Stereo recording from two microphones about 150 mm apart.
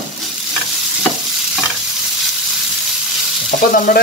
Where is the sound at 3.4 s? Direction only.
65° left (ahead or behind).